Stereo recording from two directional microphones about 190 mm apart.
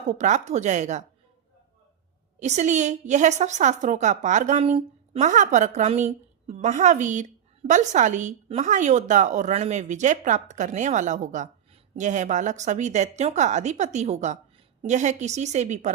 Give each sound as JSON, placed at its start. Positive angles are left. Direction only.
{"t": 0.1, "sound": "a woman's voice", "side_deg": -40}
{"t": 2.4, "sound": "a woman's voice", "side_deg": -40}